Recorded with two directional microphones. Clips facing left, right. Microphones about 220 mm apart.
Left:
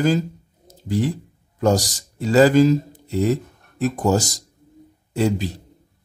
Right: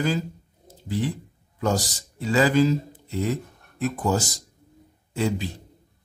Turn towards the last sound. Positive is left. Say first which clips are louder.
# left 5 dB
turn(degrees=40)  # may be behind; listen again after turning